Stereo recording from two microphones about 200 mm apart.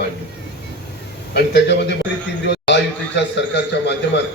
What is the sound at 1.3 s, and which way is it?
A man's voice, 60° left (ahead or behind).